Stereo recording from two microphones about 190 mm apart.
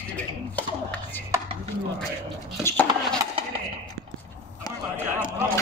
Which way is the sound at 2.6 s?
10° left (ahead or behind).